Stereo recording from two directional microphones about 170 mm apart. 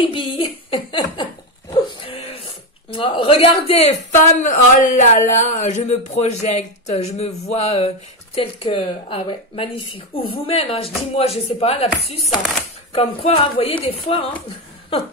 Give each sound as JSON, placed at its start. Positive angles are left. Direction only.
{"t": 0.0, "sound": "speech", "side_deg": 30}
{"t": 12.9, "sound": "speech", "side_deg": 35}